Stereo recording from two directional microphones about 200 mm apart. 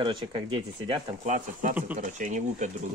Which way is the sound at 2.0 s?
40° right (ahead or behind).